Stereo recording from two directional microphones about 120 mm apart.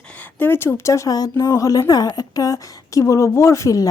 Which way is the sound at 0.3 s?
20° left (ahead or behind).